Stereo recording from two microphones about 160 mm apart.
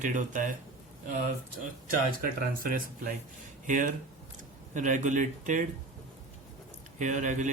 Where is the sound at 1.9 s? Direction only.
60° right (ahead or behind).